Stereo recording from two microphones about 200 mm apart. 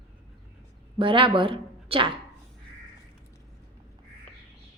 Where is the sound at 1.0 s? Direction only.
25° right (ahead or behind).